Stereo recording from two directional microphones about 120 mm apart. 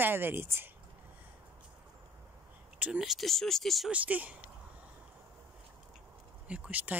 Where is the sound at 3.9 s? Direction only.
10° right (ahead or behind).